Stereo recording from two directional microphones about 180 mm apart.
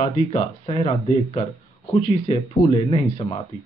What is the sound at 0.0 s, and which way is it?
Speech, 35° left (ahead or behind).